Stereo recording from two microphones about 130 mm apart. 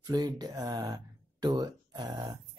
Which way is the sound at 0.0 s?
30° right (ahead or behind).